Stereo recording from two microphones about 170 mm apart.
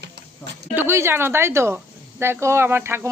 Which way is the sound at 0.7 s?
15° right (ahead or behind).